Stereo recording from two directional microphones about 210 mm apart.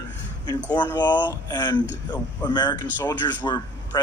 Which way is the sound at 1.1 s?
10° left (ahead or behind).